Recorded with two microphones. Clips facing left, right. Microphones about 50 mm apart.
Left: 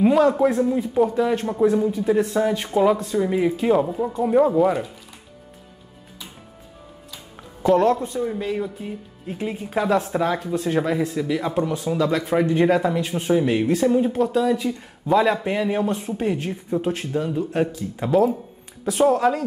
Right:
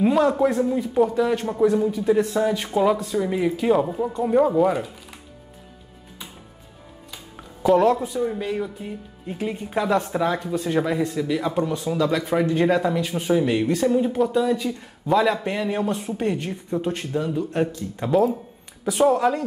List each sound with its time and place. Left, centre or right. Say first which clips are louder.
0.0 s speech: left 2 dB; centre
7.6 s speech: even; centre
12.4 s speech: left 2 dB; centre
12.7 s speech: left 1 dB; centre